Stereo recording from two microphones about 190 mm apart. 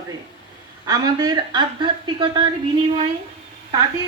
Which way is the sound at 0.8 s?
20° right (ahead or behind).